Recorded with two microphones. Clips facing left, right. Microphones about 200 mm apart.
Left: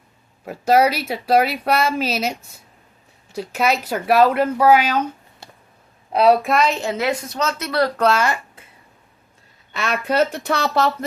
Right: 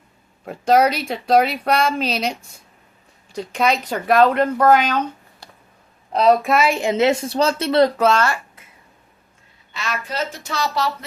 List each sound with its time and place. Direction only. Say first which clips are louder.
0.4 s speech: even; 5° left (ahead or behind)
5.4 s a sound: left 2 dB; 25° left (ahead or behind)
6.1 s a woman's voice: even; 5° left (ahead or behind); by 7.9 s 25° right (ahead or behind)
8.1 s speech: right 1 dB; 15° left (ahead or behind)
9.7 s speech: left 7 dB; 60° left (ahead or behind)